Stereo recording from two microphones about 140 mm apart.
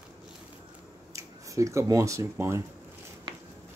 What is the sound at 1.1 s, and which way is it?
Speech, 20° right (ahead or behind).